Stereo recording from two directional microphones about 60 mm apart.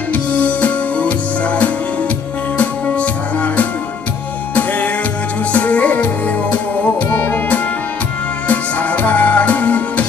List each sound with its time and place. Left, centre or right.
0.1 s music: left